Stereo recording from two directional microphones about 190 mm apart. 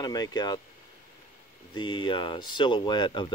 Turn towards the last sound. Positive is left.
turn(degrees=25)  # may be behind; listen again after turning